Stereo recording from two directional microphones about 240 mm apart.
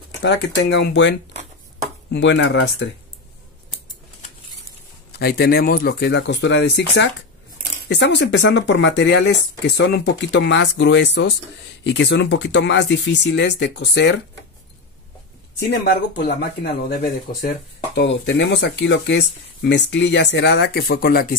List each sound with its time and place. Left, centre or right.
0.2 s speech: left
2.1 s speech: left
5.2 s speech: left
15.7 s speech: left